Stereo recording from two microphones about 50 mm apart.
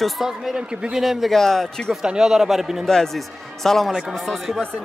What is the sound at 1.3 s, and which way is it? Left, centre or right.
Speech, centre.